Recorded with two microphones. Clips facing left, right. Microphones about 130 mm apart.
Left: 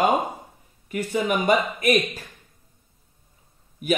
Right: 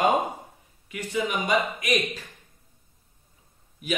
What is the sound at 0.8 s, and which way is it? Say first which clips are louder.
Speech: left 4 dB; 50° left (ahead or behind).